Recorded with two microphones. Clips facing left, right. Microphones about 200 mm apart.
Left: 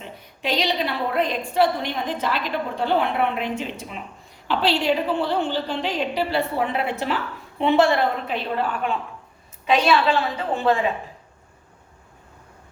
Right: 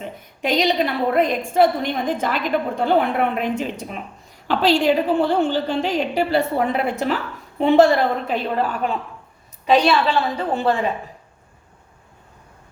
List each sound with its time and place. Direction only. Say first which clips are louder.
0.0 s a woman's voice: right 4 dB; 50° right (ahead or behind)